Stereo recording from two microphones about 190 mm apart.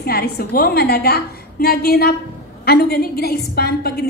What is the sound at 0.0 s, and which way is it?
A woman's voice, 55° left (ahead or behind).